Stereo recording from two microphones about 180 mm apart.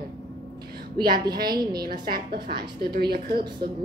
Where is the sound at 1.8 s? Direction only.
55° right (ahead or behind).